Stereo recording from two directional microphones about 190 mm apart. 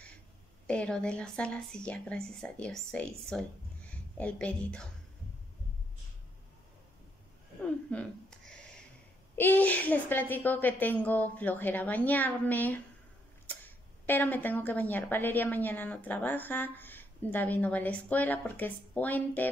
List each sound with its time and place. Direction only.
0.7 s a woman's voice: 5° left (ahead or behind)
7.9 s a sound: 5° left (ahead or behind)
9.3 s a woman's voice: 10° left (ahead or behind)
14.0 s a woman's voice: 10° left (ahead or behind)